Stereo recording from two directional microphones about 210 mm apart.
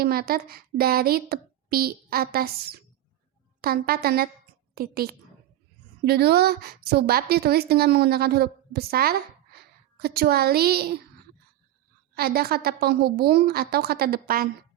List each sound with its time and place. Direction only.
0.0 s a woman's voice: 45° right (ahead or behind)
12.1 s a woman's voice: 45° right (ahead or behind)